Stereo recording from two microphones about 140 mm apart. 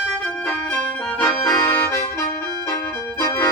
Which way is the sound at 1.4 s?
20° left (ahead or behind).